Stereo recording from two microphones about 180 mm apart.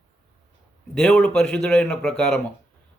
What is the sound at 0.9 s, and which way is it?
A man's voice, 5° left (ahead or behind).